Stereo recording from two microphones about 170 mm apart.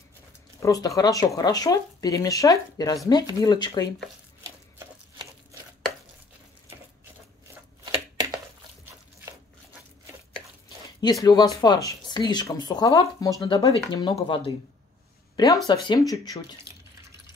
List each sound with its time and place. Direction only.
0.6 s speech: 20° left (ahead or behind)
4.4 s sewing machine: 20° right (ahead or behind)
7.8 s a sound: 25° right (ahead or behind)
11.0 s speech: 25° left (ahead or behind)